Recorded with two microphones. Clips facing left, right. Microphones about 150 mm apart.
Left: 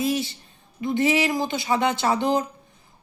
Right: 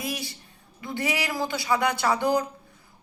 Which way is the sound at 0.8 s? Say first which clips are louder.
Left 8 dB; 20° left (ahead or behind).